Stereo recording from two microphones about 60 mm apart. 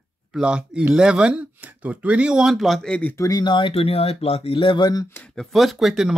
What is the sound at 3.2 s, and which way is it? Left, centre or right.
Speech, left.